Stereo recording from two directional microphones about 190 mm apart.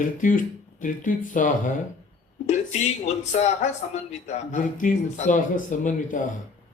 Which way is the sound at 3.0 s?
35° left (ahead or behind).